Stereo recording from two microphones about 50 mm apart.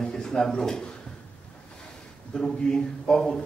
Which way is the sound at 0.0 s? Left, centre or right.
Centre.